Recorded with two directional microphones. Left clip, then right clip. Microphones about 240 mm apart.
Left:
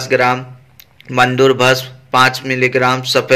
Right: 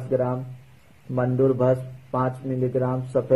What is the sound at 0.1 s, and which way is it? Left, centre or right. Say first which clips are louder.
A man's voice: left 11 dB; left.